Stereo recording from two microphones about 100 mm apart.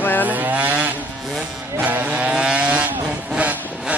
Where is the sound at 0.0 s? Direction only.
20° left (ahead or behind).